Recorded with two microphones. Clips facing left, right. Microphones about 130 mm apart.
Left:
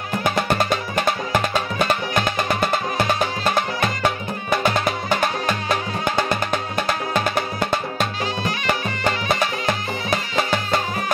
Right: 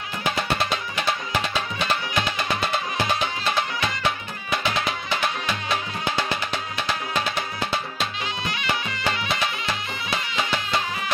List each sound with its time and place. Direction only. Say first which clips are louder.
0.2 s music: left 4 dB; 50° left (ahead or behind)